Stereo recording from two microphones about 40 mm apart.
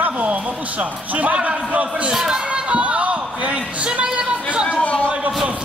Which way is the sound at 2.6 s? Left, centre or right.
Right.